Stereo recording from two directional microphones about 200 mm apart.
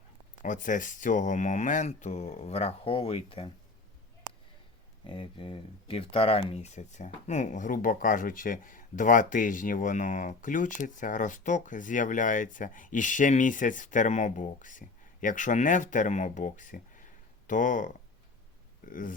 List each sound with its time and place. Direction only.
0.4 s speech: 40° left (ahead or behind)
5.0 s speech: 25° left (ahead or behind); by 19.1 s 40° left (ahead or behind)